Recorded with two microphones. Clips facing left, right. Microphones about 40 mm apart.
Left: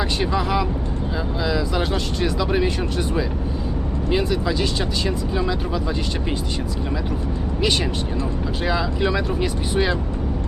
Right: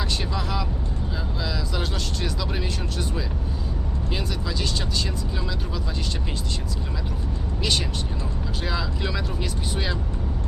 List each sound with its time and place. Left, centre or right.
0.0 s speech: left
4.1 s speech: centre
7.6 s speech: centre